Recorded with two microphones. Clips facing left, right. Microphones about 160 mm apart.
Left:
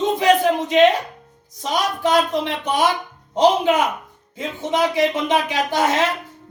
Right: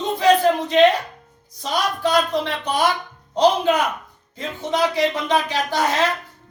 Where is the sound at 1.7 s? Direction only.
20° left (ahead or behind).